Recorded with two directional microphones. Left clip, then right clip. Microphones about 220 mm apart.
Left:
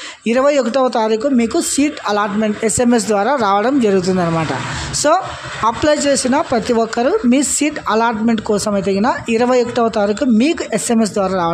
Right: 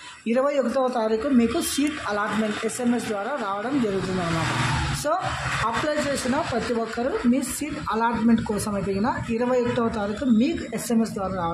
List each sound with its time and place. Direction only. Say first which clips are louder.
0.3 s speech: left 9 dB; 40° left (ahead or behind)
5.1 s speech: left 11 dB; 40° left (ahead or behind)